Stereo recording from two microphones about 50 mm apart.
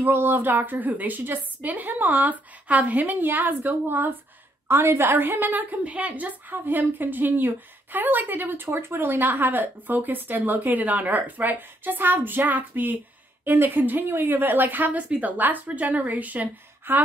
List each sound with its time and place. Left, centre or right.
0.0 s a woman's voice: right